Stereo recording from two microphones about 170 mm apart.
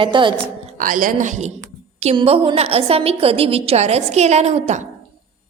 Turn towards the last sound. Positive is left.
turn(degrees=-40)  # may be behind; listen again after turning